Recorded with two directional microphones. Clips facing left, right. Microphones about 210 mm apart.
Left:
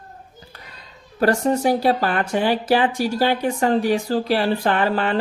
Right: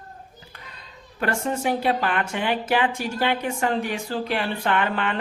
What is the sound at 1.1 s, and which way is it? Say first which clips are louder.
Speech: left 7 dB; 35° left (ahead or behind).